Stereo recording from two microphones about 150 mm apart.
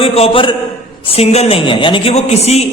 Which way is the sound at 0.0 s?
35° left (ahead or behind).